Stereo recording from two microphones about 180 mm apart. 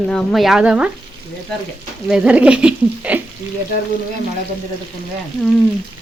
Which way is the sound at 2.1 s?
5° right (ahead or behind).